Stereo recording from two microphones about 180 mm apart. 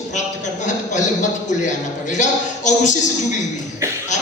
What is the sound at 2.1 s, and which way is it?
Speech, 40° left (ahead or behind).